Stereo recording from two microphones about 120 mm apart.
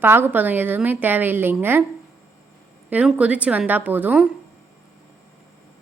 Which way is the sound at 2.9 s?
10° right (ahead or behind).